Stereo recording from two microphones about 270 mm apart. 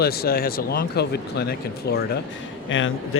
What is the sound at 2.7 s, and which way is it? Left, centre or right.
Speech, left.